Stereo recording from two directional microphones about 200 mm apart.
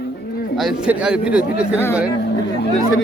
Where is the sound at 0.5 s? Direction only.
5° right (ahead or behind).